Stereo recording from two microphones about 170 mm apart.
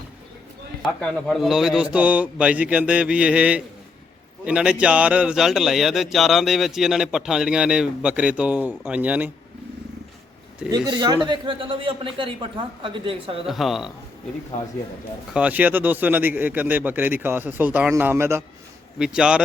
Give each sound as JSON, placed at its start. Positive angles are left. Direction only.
{"t": 0.8, "sound": "a man's voice", "side_deg": 0}
{"t": 10.7, "sound": "a man's voice", "side_deg": -25}
{"t": 13.5, "sound": "a man's voice", "side_deg": 0}
{"t": 14.5, "sound": "speech", "side_deg": 45}
{"t": 15.3, "sound": "a man's voice", "side_deg": -5}
{"t": 18.9, "sound": "a man's voice", "side_deg": -5}